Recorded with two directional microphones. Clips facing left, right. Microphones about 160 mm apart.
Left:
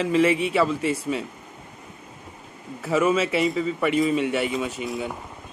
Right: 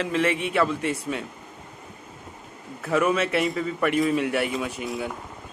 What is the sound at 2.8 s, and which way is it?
A man's voice, 5° left (ahead or behind).